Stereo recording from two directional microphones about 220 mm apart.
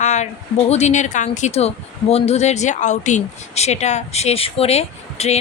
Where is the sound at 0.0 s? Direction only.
30° left (ahead or behind).